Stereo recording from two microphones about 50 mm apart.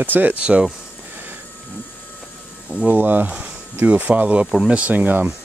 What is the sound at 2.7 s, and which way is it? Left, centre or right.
Speech, right.